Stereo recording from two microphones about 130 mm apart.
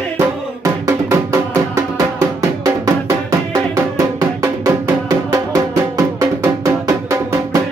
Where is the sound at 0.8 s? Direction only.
25° right (ahead or behind).